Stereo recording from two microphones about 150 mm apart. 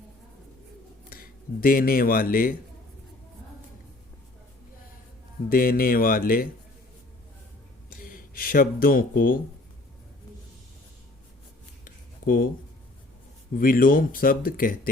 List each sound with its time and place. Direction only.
1.1 s speech: 75° left (ahead or behind)
5.5 s speech: 75° left (ahead or behind)
7.9 s speech: 75° left (ahead or behind)
11.9 s a sound: 70° left (ahead or behind)
13.6 s speech: 70° left (ahead or behind)